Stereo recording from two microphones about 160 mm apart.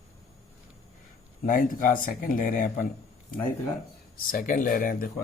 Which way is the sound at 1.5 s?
60° left (ahead or behind).